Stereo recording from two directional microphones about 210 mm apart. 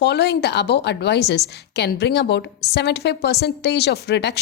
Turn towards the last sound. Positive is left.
turn(degrees=50)  # may be behind; listen again after turning